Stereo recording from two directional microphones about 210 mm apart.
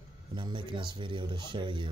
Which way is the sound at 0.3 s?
20° right (ahead or behind).